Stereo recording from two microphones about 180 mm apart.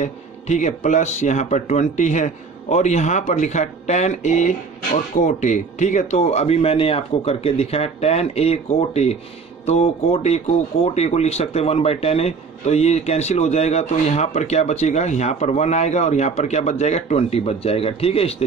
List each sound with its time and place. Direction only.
0.0 s speech: 40° left (ahead or behind)